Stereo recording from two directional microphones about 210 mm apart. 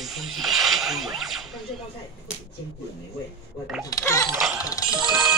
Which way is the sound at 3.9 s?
15° left (ahead or behind).